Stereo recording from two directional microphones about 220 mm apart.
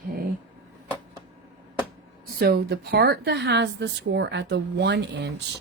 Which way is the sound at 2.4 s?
45° right (ahead or behind).